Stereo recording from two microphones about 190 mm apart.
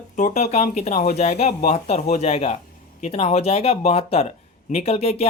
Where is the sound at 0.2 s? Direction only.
40° left (ahead or behind).